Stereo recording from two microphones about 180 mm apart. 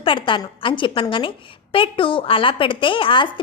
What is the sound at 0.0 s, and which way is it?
A woman's voice, 30° left (ahead or behind).